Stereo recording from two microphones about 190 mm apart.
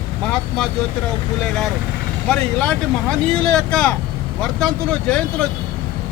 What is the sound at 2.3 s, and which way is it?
Speech, 5° left (ahead or behind).